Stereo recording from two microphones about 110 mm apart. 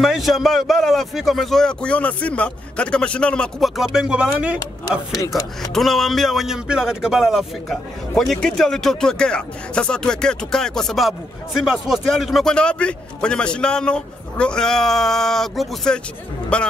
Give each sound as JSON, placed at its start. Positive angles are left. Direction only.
{"t": 0.0, "sound": "speech", "side_deg": 0}
{"t": 4.6, "sound": "speech", "side_deg": 30}
{"t": 5.3, "sound": "a man's voice", "side_deg": 5}